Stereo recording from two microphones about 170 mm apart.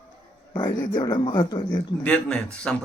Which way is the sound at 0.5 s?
25° left (ahead or behind).